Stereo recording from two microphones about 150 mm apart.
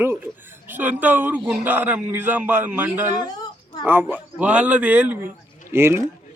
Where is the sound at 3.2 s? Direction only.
25° left (ahead or behind).